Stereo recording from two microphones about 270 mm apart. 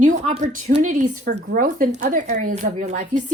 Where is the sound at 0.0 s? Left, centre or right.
Right.